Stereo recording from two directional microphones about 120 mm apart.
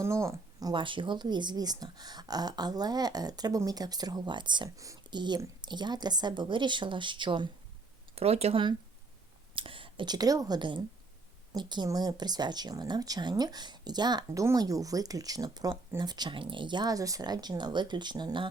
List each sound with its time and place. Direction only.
0.0 s speech: 25° right (ahead or behind)
0.7 s speech: 45° right (ahead or behind)
8.1 s speech: 60° right (ahead or behind)
9.6 s speech: 45° right (ahead or behind)